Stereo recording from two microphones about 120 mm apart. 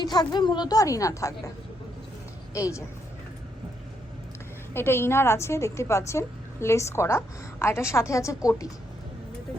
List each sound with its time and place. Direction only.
0.0 s a woman's voice: 35° left (ahead or behind)
2.5 s a woman's voice: 25° left (ahead or behind)
4.7 s a woman's voice: 20° left (ahead or behind)